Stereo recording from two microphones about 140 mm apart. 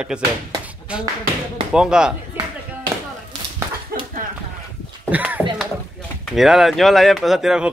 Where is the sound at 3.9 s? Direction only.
90° right.